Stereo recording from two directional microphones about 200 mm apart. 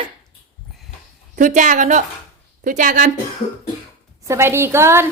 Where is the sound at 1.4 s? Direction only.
40° right (ahead or behind).